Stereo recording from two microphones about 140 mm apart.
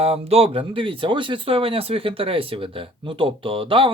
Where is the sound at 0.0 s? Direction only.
45° right (ahead or behind).